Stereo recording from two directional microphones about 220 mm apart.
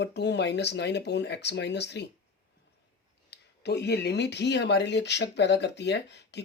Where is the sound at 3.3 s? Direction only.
50° left (ahead or behind).